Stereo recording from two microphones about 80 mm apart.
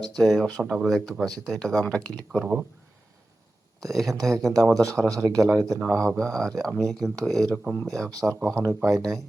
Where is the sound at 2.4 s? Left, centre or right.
Centre.